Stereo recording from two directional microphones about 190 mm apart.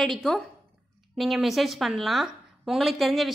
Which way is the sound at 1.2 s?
Centre (ahead or behind).